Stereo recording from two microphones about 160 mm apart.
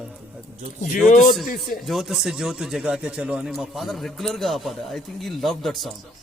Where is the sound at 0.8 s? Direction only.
45° left (ahead or behind).